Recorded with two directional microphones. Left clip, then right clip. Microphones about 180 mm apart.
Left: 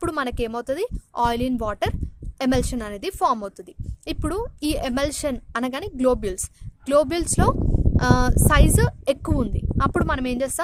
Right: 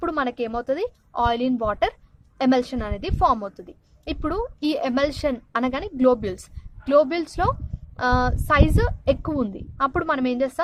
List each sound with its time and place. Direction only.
0.0 s a woman's voice: 40° left (ahead or behind)